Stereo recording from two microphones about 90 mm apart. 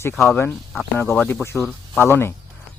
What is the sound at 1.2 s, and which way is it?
Speech, 25° left (ahead or behind).